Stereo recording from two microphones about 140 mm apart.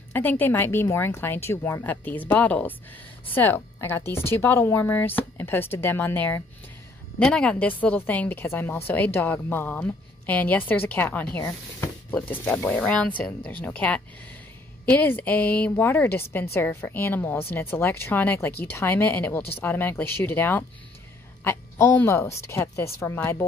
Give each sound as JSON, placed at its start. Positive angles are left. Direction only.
{"t": 0.1, "sound": "a woman's voice", "side_deg": 15}